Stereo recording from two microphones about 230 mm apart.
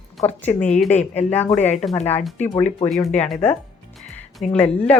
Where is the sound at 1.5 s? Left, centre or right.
Left.